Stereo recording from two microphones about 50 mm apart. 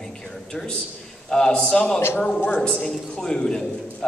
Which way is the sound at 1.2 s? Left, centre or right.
Centre.